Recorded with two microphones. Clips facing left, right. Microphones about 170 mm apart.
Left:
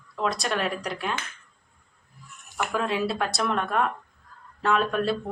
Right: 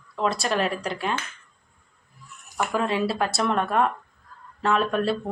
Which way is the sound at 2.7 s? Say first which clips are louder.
Right 2 dB; centre (ahead or behind).